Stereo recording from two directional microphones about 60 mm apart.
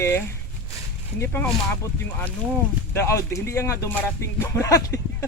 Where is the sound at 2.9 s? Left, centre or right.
Left.